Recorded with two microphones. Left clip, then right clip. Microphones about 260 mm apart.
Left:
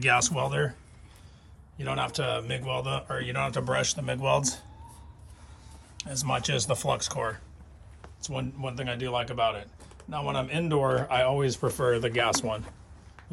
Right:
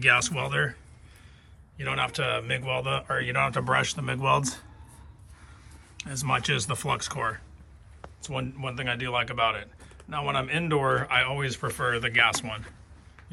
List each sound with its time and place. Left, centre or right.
0.1 s speech: centre
1.8 s speech: centre
6.0 s speech: centre